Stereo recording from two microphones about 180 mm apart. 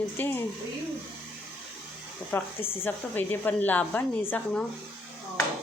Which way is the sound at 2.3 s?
10° left (ahead or behind).